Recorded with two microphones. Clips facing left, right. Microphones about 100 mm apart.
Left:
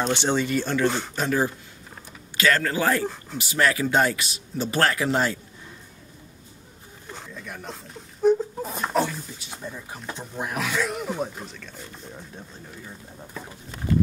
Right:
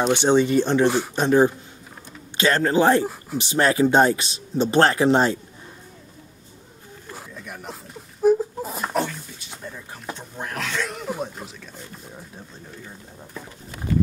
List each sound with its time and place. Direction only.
0.0 s speech: 15° right (ahead or behind)
0.8 s speech: 5° right (ahead or behind)
1.1 s speech: 25° right (ahead or behind)
7.1 s a sound: 5° right (ahead or behind); by 10.0 s 10° left (ahead or behind)
10.3 s speech: 10° left (ahead or behind)